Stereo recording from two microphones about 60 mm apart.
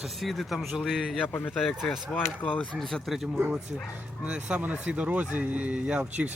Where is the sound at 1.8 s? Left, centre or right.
Centre.